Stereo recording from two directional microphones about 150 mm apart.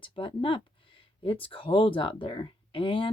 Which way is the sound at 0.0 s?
35° left (ahead or behind).